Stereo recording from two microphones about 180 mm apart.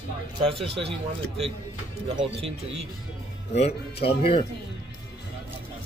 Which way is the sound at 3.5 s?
35° left (ahead or behind).